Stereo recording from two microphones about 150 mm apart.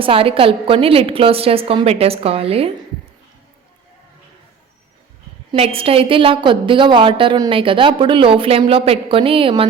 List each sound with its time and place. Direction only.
0.0 s a woman's voice: 35° right (ahead or behind)
5.5 s a woman's voice: 40° right (ahead or behind)